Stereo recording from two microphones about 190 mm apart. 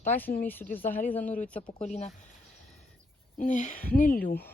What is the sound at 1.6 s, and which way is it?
Speech, 30° left (ahead or behind).